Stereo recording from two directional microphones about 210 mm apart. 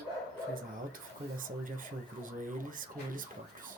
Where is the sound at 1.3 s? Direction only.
40° right (ahead or behind).